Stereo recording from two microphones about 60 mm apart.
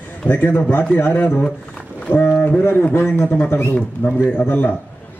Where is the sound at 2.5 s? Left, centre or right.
Left.